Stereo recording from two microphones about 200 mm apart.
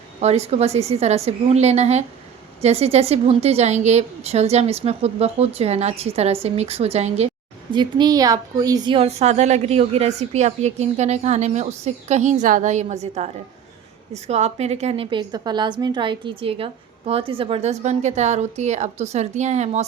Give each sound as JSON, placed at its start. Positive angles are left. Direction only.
{"t": 0.2, "sound": "a woman's voice", "side_deg": -30}